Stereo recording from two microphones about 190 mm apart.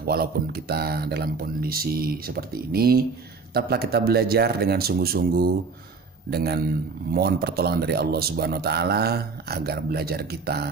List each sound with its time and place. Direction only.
0.0 s a man's voice: 55° right (ahead or behind)